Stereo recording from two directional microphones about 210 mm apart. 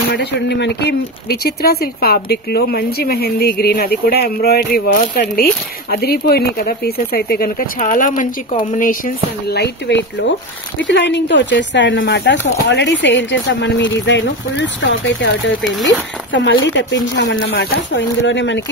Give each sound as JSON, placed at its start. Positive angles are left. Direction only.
{"t": 0.1, "sound": "speech", "side_deg": 50}